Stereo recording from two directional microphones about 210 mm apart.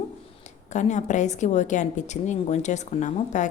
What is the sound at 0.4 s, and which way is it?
Speech, 35° left (ahead or behind).